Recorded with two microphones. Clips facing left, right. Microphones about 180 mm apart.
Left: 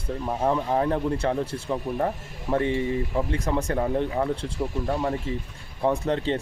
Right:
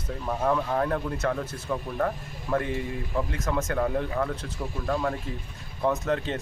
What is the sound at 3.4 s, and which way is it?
Speech, 30° left (ahead or behind).